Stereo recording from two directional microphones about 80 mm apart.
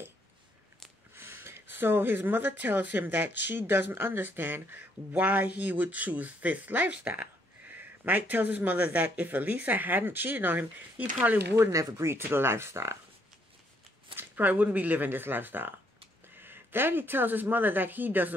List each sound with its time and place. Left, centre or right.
1.1 s speech: right
11.5 s speech: right
14.1 s speech: right